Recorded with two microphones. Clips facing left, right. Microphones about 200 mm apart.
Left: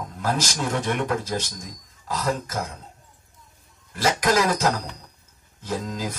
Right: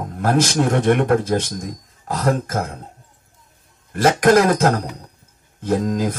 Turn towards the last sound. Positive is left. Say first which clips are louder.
# right 9 dB
turn(degrees=-55)  # may be behind; listen again after turning